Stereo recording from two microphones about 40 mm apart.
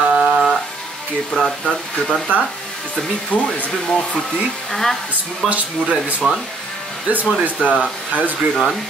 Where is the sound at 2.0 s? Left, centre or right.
Right.